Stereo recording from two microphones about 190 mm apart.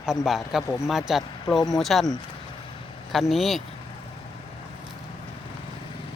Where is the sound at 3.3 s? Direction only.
Centre (ahead or behind).